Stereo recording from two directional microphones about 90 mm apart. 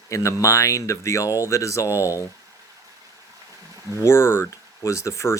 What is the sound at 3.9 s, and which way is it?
Speech, 30° left (ahead or behind).